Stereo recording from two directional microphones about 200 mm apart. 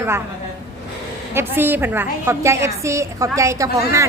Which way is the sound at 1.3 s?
10° right (ahead or behind).